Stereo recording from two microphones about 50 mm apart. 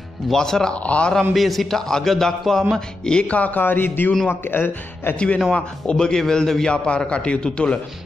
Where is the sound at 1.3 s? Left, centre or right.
Centre.